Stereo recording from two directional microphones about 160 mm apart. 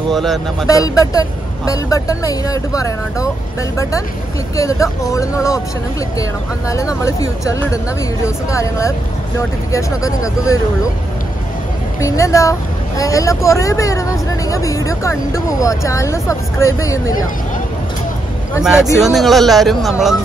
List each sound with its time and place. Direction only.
0.1 s speech: centre (ahead or behind)
0.7 s speech: 20° left (ahead or behind)
4.6 s speech: 20° left (ahead or behind)
6.7 s speech: 20° left (ahead or behind)
12.0 s speech: 20° left (ahead or behind)
18.6 s speech: 5° right (ahead or behind)